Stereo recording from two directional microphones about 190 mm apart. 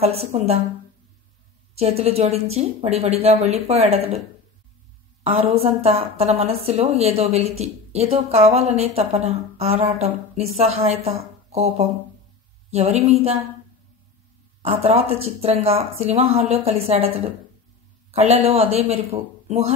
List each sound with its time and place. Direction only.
0.0 s a woman's voice: 35° right (ahead or behind)
1.8 s a woman's voice: 35° right (ahead or behind)
5.2 s a woman's voice: 30° right (ahead or behind)
14.6 s a woman's voice: 35° right (ahead or behind)
18.1 s a woman's voice: 30° right (ahead or behind)